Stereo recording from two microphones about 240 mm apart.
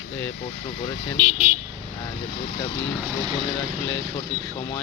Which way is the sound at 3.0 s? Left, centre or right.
Centre.